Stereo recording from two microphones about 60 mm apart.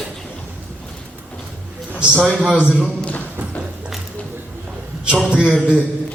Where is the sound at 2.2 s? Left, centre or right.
Centre.